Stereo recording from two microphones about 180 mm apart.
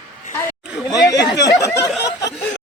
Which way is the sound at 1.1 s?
20° left (ahead or behind).